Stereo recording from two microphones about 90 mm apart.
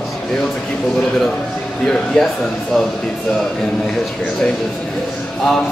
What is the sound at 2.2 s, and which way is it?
Speech, 5° left (ahead or behind).